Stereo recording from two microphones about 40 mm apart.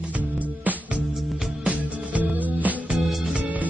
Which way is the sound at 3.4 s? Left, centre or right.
Right.